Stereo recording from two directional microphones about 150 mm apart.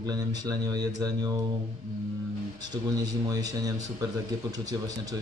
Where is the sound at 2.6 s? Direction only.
25° right (ahead or behind).